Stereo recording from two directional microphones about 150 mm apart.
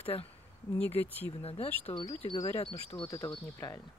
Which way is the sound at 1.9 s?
30° left (ahead or behind).